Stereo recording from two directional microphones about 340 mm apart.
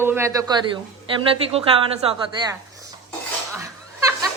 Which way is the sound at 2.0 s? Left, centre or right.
Centre.